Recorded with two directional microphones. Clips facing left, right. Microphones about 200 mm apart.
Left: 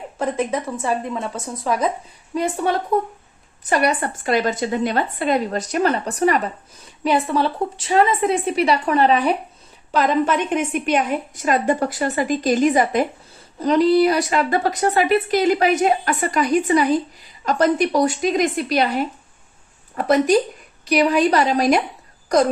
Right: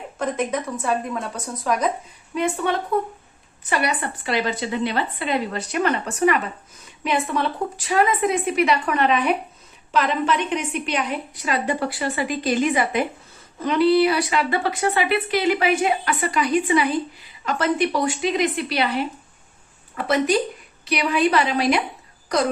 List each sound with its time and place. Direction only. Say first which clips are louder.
0.2 s a woman's voice: left 2 dB; 30° left (ahead or behind)
9.9 s a woman's voice: left 3 dB; 45° left (ahead or behind)